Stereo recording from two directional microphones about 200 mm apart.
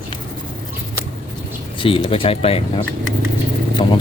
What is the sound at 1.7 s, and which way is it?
Speech, 25° left (ahead or behind).